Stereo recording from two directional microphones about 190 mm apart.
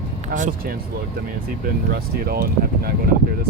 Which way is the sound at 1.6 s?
55° right (ahead or behind).